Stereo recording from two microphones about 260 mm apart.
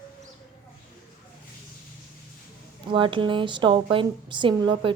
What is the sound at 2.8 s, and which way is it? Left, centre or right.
A woman's voice, centre.